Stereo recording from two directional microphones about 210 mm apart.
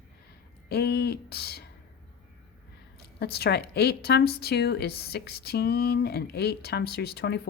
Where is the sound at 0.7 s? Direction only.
50° left (ahead or behind).